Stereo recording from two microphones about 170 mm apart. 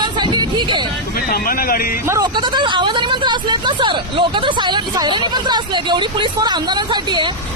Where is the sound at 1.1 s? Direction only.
60° left (ahead or behind).